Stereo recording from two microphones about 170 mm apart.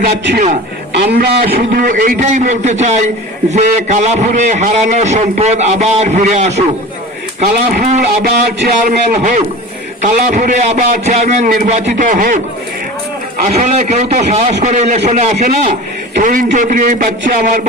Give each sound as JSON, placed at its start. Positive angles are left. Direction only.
{"t": 0.9, "sound": "a man's voice", "side_deg": -60}
{"t": 7.4, "sound": "speech", "side_deg": -60}
{"t": 7.9, "sound": "a man's voice", "side_deg": -40}
{"t": 13.4, "sound": "a man's voice", "side_deg": -45}